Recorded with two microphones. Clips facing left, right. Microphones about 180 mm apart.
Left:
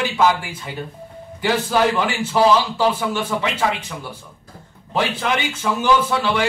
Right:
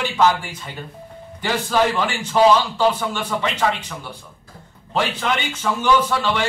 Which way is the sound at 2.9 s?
5° left (ahead or behind).